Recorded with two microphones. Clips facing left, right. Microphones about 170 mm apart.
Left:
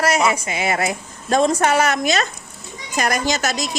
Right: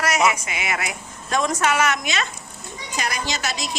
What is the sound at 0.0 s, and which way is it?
A woman's voice, 30° left (ahead or behind).